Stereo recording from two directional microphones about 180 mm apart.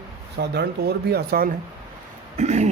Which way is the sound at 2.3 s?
40° right (ahead or behind).